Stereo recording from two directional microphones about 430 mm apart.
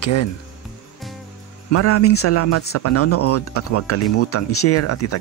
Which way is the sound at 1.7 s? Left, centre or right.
Left.